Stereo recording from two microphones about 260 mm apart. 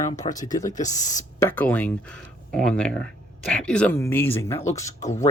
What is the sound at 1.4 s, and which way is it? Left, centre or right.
Speech, centre.